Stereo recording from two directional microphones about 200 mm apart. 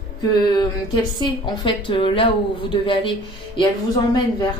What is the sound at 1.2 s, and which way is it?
A woman's voice, 20° left (ahead or behind).